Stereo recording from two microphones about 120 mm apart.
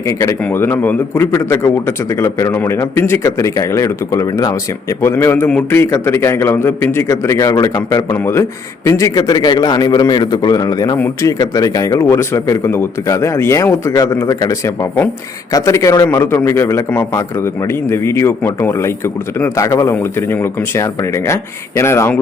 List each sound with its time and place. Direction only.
0.1 s a man's voice: 25° left (ahead or behind)
8.1 s a man's voice: 20° left (ahead or behind)
10.9 s a man's voice: 20° left (ahead or behind)